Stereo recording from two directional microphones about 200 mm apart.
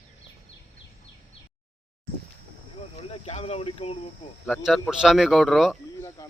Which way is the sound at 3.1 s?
30° left (ahead or behind).